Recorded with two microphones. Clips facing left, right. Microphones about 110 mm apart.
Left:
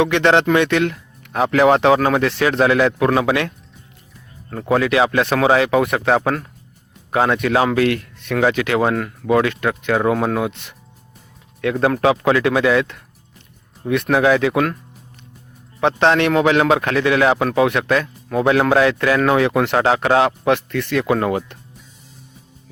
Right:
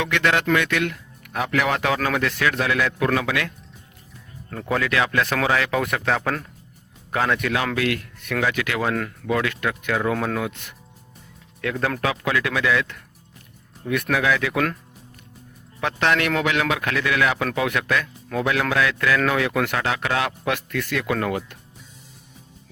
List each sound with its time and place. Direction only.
0.0 s a man's voice: 25° left (ahead or behind)
4.6 s a man's voice: 30° left (ahead or behind)
15.8 s a man's voice: 25° left (ahead or behind)